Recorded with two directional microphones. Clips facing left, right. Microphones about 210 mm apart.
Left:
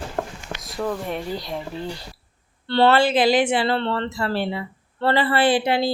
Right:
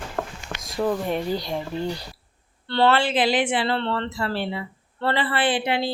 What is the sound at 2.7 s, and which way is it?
Speech, 35° left (ahead or behind).